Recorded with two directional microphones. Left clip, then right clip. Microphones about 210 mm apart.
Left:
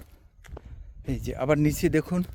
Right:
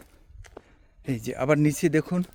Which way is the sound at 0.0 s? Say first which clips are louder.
Right 1 dB; centre (ahead or behind).